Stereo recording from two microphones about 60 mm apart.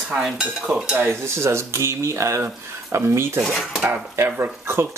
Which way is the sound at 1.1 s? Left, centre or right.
Right.